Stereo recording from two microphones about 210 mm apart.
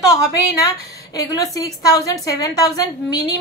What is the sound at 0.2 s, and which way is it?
A woman's voice, 15° left (ahead or behind).